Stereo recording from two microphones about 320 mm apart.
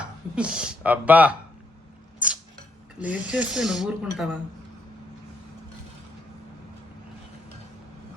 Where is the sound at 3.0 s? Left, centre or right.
Centre.